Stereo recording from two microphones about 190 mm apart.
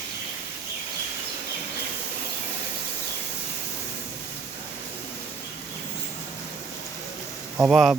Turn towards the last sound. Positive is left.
turn(degrees=-5)  # may be behind; listen again after turning